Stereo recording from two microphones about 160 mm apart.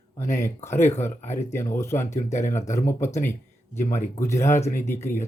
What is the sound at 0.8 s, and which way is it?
Speech, 15° left (ahead or behind).